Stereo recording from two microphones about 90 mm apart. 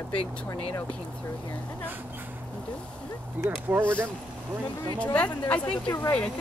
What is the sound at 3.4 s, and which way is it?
Speech, 25° right (ahead or behind).